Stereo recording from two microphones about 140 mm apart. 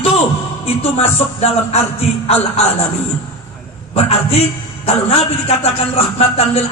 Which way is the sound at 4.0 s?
45° left (ahead or behind).